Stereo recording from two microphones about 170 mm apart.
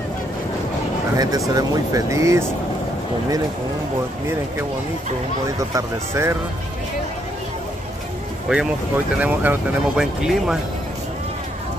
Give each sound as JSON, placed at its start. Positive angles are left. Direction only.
{"t": 1.1, "sound": "speech", "side_deg": -20}
{"t": 5.6, "sound": "speech", "side_deg": -20}
{"t": 8.5, "sound": "speech", "side_deg": -5}